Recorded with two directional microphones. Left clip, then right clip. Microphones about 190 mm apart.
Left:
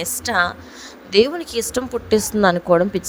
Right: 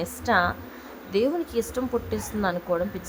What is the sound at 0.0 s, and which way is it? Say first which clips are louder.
A woman's voice: left 3 dB; 45° left (ahead or behind).